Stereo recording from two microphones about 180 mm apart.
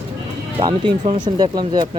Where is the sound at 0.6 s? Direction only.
25° right (ahead or behind).